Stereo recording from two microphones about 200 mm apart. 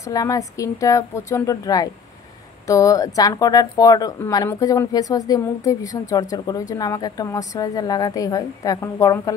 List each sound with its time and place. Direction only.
0.0 s speech: 15° left (ahead or behind)